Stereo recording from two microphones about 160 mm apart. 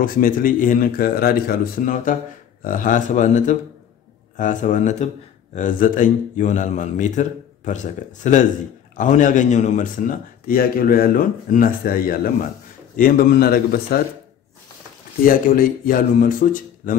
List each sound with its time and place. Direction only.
0.0 s a man's voice: 60° left (ahead or behind); by 14.1 s 75° left (ahead or behind)
15.2 s a man's voice: 60° left (ahead or behind)